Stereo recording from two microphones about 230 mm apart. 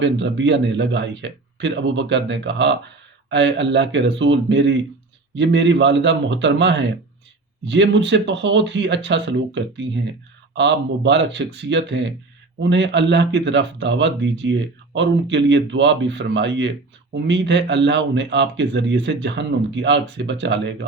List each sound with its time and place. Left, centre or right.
0.0 s speech: right